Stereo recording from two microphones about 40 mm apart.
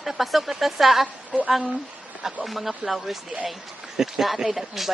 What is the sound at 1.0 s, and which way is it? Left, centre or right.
Speech, right.